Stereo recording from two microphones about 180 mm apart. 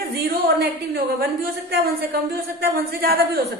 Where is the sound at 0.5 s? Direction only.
60° right (ahead or behind).